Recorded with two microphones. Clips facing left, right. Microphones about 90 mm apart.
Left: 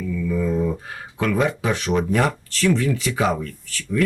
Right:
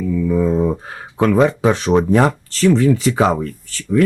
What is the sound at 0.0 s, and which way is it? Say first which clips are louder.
Speech: right 6 dB; 30° right (ahead or behind).